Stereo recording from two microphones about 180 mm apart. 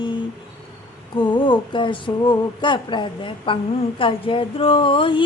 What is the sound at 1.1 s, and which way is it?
Speech, 30° left (ahead or behind).